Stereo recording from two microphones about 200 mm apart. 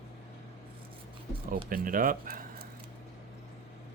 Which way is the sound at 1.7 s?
45° right (ahead or behind).